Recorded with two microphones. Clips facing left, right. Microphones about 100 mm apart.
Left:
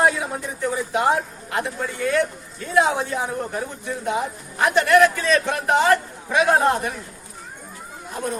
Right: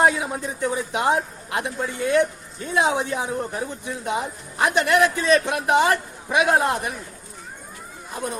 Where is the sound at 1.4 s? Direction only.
20° right (ahead or behind).